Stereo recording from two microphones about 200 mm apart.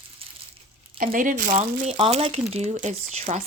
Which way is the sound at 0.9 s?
45° right (ahead or behind).